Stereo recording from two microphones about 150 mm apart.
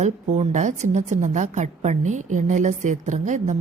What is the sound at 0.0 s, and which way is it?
A woman's voice, 50° right (ahead or behind).